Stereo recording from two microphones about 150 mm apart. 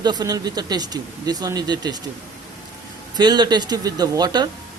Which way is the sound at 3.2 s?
30° right (ahead or behind).